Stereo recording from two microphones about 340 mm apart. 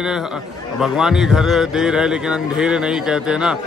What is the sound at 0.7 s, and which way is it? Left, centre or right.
A man's voice, centre.